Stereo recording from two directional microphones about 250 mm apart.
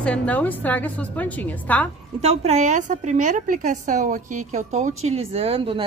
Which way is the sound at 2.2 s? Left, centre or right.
Right.